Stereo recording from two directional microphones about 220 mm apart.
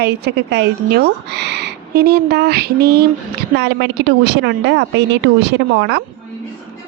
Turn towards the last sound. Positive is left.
turn(degrees=-50)  # may be behind; listen again after turning